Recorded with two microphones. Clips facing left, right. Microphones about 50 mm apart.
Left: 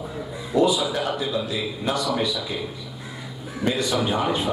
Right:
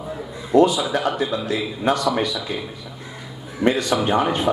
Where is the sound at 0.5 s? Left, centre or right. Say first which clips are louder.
Right 5 dB; right.